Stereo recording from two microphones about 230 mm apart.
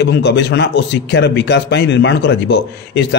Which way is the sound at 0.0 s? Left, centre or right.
Left.